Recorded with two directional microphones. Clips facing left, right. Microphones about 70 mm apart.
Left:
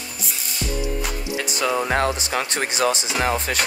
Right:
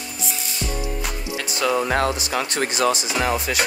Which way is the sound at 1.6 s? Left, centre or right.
Centre.